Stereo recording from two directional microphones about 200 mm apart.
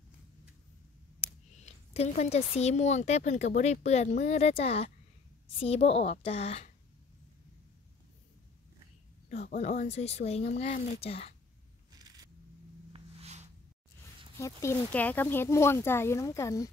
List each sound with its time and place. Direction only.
1.6 s a woman's voice: 35° left (ahead or behind)
9.3 s a woman's voice: 35° left (ahead or behind)
12.9 s a sound: 35° right (ahead or behind)
14.4 s speech: 15° left (ahead or behind)